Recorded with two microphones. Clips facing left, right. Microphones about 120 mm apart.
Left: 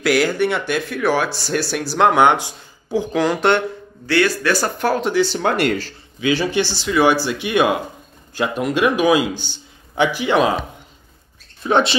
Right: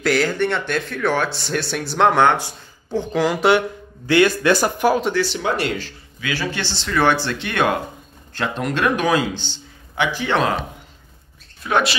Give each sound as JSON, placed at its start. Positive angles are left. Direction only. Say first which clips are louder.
{"t": 0.0, "sound": "speech", "louder": "left 2 dB", "side_deg": 5}
{"t": 2.2, "sound": "speech", "louder": "left 2 dB", "side_deg": 15}
{"t": 2.9, "sound": "speech", "louder": "left 1 dB", "side_deg": 5}
{"t": 4.1, "sound": "speech", "louder": "right 2 dB", "side_deg": -20}
{"t": 5.4, "sound": "speech", "louder": "left 4 dB", "side_deg": 55}
{"t": 6.2, "sound": "a man's voice", "louder": "left 7 dB", "side_deg": 20}
{"t": 11.6, "sound": "speech", "louder": "left 3 dB", "side_deg": 25}